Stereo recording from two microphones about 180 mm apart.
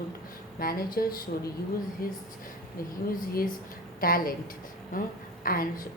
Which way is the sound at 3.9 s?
50° left (ahead or behind).